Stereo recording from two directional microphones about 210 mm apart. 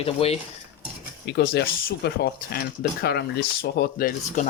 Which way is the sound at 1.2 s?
55° left (ahead or behind).